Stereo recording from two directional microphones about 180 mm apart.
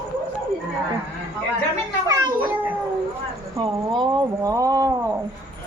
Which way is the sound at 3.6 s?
25° right (ahead or behind).